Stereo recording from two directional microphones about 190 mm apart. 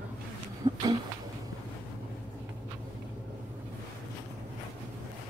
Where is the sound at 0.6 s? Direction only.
25° right (ahead or behind).